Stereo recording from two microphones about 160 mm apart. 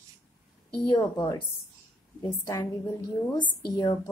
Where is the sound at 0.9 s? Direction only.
30° left (ahead or behind).